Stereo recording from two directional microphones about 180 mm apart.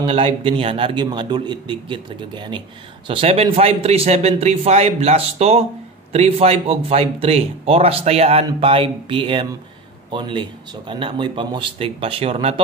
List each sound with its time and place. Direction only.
0.0 s a man's voice: 30° right (ahead or behind)